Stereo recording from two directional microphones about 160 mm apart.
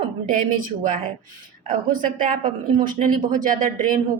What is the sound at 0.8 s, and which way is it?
Speech, 55° right (ahead or behind).